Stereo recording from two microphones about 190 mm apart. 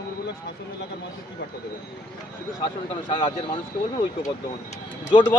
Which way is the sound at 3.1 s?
25° left (ahead or behind).